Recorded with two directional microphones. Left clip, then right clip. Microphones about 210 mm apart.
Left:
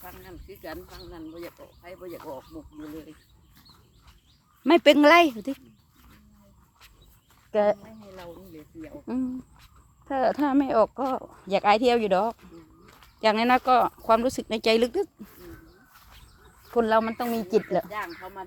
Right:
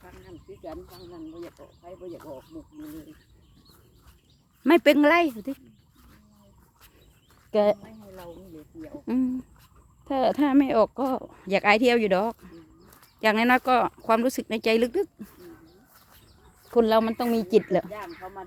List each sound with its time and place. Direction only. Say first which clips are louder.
0.0 s a sound: left 3 dB; 30° left (ahead or behind)
1.4 s speech: left 1 dB; centre (ahead or behind)
1.8 s speech: even; 30° left (ahead or behind)
4.6 s speech: left 1 dB; 5° right (ahead or behind)
7.5 s speech: right 1 dB; 20° right (ahead or behind)
7.9 s speech: left 1 dB; centre (ahead or behind)
9.0 s speech: right 4 dB; 25° right (ahead or behind)
12.9 s a sound: even; 5° right (ahead or behind)
13.7 s speech: left 2 dB; 15° right (ahead or behind)
16.7 s speech: right 2 dB; 25° right (ahead or behind)
17.9 s speech: left 3 dB; 25° left (ahead or behind)